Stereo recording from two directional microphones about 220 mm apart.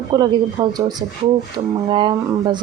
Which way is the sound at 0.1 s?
20° right (ahead or behind).